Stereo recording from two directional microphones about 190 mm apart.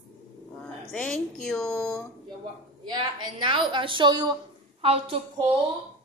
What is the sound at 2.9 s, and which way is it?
A woman's voice, 25° right (ahead or behind).